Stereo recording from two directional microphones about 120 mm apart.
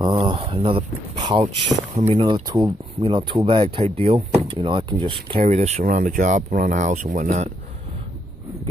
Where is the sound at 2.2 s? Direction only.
40° right (ahead or behind).